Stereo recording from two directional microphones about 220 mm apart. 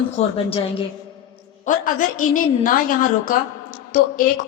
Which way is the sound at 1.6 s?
35° left (ahead or behind).